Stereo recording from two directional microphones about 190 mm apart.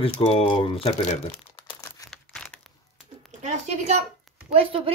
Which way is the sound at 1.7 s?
20° left (ahead or behind).